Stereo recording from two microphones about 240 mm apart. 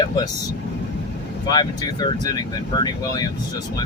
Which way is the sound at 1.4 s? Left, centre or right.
Centre.